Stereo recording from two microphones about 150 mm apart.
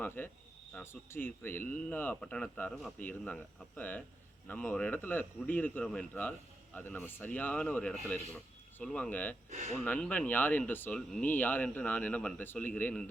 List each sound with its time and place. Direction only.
0.0 s speech: 15° left (ahead or behind)
9.5 s speech: 50° right (ahead or behind)
9.7 s speech: 10° left (ahead or behind)